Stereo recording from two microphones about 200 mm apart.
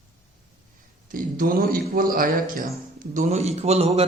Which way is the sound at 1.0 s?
45° right (ahead or behind).